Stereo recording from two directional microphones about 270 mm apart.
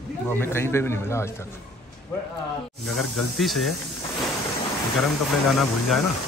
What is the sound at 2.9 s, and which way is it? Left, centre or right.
Speech, centre.